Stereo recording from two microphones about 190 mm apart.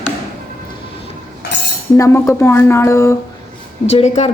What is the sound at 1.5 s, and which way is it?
Cutlery, 65° left (ahead or behind).